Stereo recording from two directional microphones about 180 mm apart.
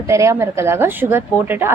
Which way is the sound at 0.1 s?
15° right (ahead or behind).